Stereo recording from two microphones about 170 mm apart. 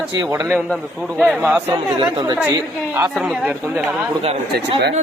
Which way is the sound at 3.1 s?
Centre (ahead or behind).